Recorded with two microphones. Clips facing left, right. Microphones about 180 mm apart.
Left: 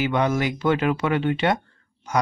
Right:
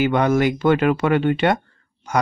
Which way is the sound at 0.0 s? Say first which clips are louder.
Right 5 dB; 55° right (ahead or behind).